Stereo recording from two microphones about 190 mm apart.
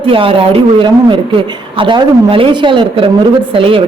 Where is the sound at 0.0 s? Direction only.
30° right (ahead or behind).